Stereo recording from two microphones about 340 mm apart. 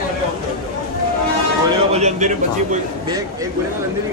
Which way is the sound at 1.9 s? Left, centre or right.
Centre.